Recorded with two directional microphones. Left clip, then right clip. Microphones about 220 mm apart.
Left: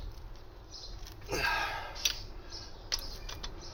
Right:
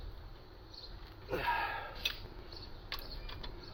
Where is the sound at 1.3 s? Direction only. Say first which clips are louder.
Left 3 dB; 15° left (ahead or behind).